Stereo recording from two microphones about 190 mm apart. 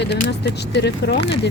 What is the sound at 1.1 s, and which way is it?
Speech, 30° left (ahead or behind).